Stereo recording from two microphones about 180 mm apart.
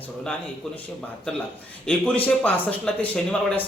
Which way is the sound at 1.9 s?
10° left (ahead or behind).